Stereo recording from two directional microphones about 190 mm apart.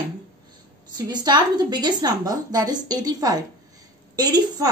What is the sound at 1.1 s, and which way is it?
A woman's voice, 20° right (ahead or behind).